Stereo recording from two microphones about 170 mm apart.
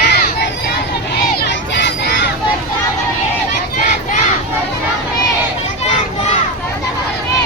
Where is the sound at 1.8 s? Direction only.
85° left.